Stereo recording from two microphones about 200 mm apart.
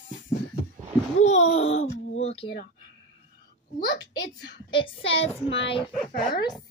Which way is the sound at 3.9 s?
65° left (ahead or behind).